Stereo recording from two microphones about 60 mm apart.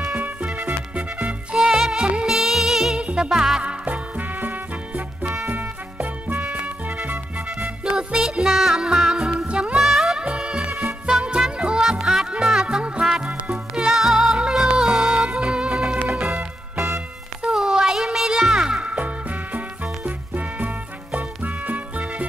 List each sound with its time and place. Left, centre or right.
0.1 s music: right
1.5 s music: centre
2.2 s music: centre
3.0 s music: centre
3.3 s music: centre
3.8 s music: right
5.2 s music: centre
9.8 s music: centre
10.2 s music: centre
12.6 s music: centre
15.2 s music: centre
17.6 s music: centre; by 22.0 s right